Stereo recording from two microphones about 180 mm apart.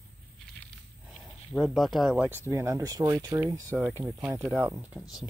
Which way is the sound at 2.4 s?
15° right (ahead or behind).